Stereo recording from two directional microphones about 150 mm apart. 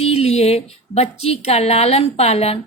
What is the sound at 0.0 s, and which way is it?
A woman's voice, 45° left (ahead or behind).